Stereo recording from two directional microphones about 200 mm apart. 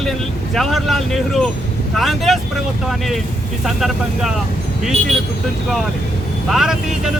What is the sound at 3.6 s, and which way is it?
Speech, centre (ahead or behind).